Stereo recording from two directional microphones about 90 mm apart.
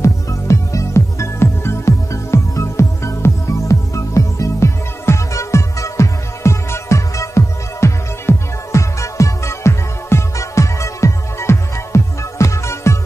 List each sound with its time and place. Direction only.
0.0 s music: 35° left (ahead or behind)